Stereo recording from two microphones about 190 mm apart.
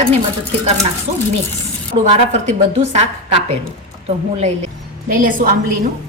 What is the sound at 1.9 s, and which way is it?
A woman's voice, 35° right (ahead or behind).